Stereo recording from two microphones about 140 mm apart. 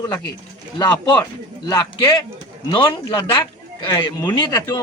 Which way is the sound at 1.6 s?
35° left (ahead or behind).